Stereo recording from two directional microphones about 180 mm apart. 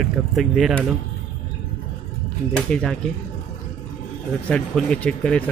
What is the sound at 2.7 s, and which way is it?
Speech, 5° left (ahead or behind).